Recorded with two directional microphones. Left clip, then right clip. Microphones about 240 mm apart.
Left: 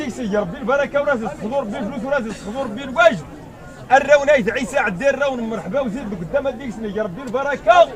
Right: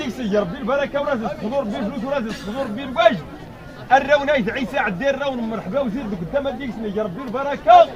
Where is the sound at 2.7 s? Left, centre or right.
Left.